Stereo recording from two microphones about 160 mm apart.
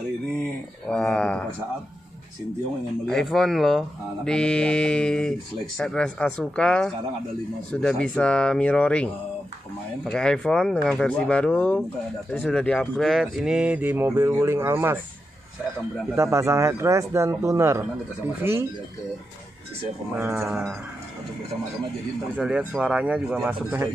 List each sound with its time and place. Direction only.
0.4 s a sound: 5° left (ahead or behind)
3.1 s speech: centre (ahead or behind); by 15.0 s 15° right (ahead or behind)
16.2 s speech: 15° right (ahead or behind)
20.2 s speech: 15° right (ahead or behind)
20.4 s speech: centre (ahead or behind)
22.4 s speech: 5° right (ahead or behind)